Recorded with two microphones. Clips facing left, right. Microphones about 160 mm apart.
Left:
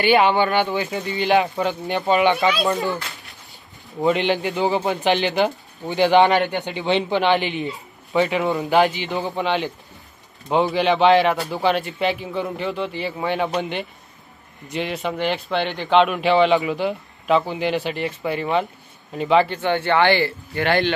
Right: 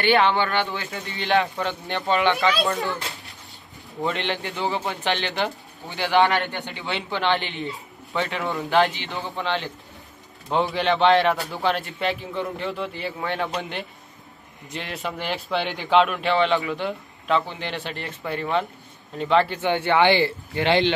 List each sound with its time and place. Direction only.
0.0 s speech: 10° left (ahead or behind)
4.0 s speech: 10° left (ahead or behind)
10.5 s speech: 5° left (ahead or behind)
19.5 s speech: 15° right (ahead or behind)